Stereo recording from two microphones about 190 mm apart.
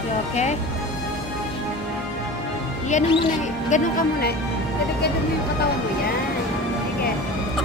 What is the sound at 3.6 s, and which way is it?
Speech, 40° left (ahead or behind).